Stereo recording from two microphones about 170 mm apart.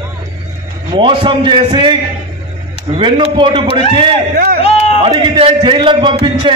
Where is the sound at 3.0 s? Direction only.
30° right (ahead or behind).